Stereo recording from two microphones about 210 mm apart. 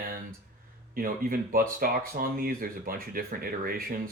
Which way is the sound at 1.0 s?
40° right (ahead or behind).